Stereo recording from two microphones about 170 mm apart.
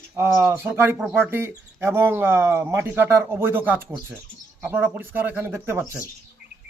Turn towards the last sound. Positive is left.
turn(degrees=-10)  # may be behind; listen again after turning